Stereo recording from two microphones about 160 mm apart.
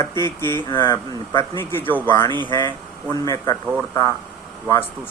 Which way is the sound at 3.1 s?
20° left (ahead or behind).